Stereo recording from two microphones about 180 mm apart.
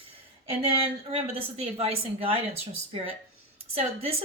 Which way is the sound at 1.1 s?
35° right (ahead or behind).